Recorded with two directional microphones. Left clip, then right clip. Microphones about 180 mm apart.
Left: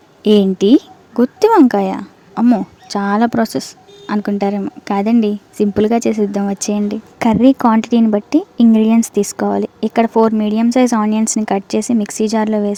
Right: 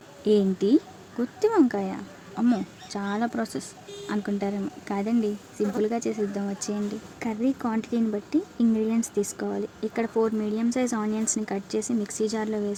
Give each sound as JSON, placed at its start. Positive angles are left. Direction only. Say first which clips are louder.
{"t": 0.2, "sound": "a woman's voice", "louder": "left 10 dB", "side_deg": 45}